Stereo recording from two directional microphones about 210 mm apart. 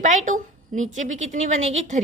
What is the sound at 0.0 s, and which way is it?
A woman's voice, 35° right (ahead or behind).